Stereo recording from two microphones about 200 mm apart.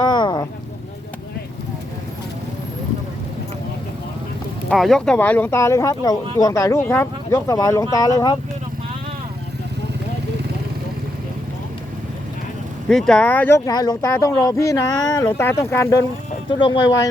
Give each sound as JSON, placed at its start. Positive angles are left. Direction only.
{"t": 0.0, "sound": "vehicle", "side_deg": 20}
{"t": 4.7, "sound": "speech", "side_deg": 0}
{"t": 12.9, "sound": "speech", "side_deg": 5}
{"t": 13.7, "sound": "speech", "side_deg": 20}
{"t": 16.6, "sound": "speech", "side_deg": 25}